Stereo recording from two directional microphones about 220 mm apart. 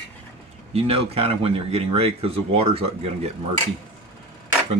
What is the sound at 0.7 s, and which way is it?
Speech, 25° right (ahead or behind).